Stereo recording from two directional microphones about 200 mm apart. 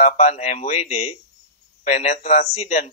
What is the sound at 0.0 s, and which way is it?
Speech, 35° left (ahead or behind).